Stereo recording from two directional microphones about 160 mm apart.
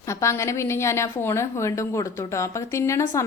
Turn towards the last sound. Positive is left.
turn(degrees=15)  # may be behind; listen again after turning